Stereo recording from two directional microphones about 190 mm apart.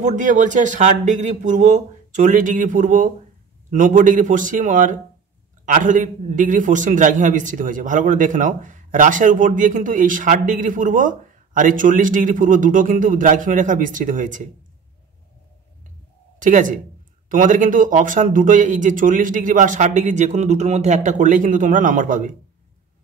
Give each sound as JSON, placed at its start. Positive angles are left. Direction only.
{"t": 0.0, "sound": "a man's voice", "side_deg": -40}
{"t": 16.3, "sound": "a man's voice", "side_deg": -45}